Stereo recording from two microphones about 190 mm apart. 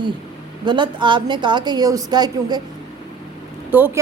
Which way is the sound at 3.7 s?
10° right (ahead or behind).